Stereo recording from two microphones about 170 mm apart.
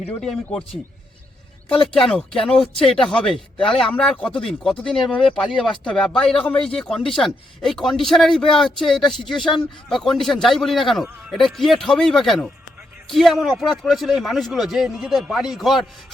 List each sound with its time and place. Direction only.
0.1 s speech: 5° left (ahead or behind)
2.0 s speech: 5° left (ahead or behind)
2.3 s speech: 30° left (ahead or behind)
2.9 s speech: centre (ahead or behind)
6.3 s speech: 30° left (ahead or behind)
6.7 s speech: 5° left (ahead or behind)